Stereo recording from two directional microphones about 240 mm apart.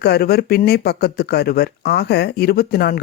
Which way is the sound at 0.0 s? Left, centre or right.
Left.